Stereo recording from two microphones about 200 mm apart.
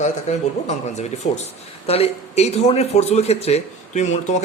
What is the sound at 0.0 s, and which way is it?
A man's voice, 35° left (ahead or behind).